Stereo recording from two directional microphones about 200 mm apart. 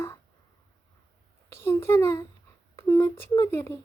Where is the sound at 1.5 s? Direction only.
10° left (ahead or behind).